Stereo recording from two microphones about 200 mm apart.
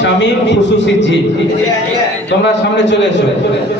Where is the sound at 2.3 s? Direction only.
65° left (ahead or behind).